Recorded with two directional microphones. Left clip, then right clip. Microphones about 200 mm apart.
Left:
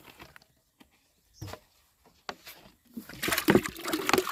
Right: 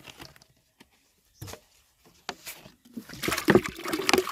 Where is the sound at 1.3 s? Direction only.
30° right (ahead or behind).